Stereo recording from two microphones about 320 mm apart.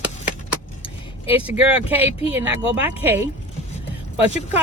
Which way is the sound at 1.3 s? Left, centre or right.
Centre.